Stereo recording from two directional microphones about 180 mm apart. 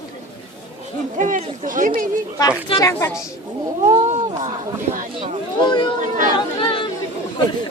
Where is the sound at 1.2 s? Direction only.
45° right (ahead or behind).